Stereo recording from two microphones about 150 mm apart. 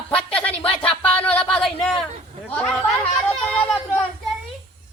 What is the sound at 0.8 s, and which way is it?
Speech, 10° left (ahead or behind).